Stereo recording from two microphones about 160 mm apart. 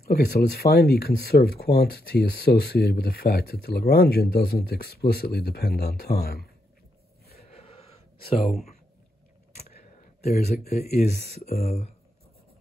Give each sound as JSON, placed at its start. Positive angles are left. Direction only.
{"t": 0.0, "sound": "speech", "side_deg": 75}
{"t": 7.3, "sound": "a sound", "side_deg": 40}
{"t": 10.2, "sound": "speech", "side_deg": 75}
{"t": 11.6, "sound": "speech", "side_deg": 40}